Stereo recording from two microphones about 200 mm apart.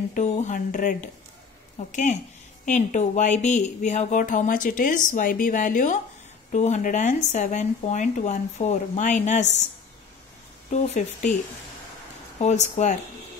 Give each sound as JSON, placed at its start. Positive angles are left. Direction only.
{"t": 0.1, "sound": "speech", "side_deg": 40}
{"t": 10.7, "sound": "speech", "side_deg": 35}
{"t": 12.4, "sound": "speech", "side_deg": 35}